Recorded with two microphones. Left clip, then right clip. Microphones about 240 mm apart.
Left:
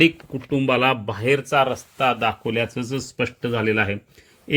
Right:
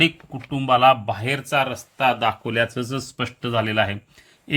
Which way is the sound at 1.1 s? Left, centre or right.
Centre.